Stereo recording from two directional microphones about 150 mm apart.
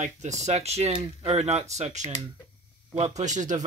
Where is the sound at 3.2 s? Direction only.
55° right (ahead or behind).